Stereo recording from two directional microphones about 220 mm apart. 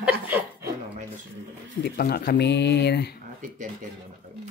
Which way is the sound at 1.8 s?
45° left (ahead or behind).